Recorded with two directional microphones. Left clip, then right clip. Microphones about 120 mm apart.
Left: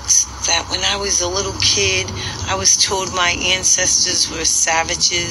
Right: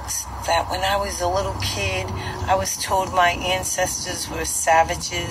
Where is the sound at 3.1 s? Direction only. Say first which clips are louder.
Even; 10° left (ahead or behind).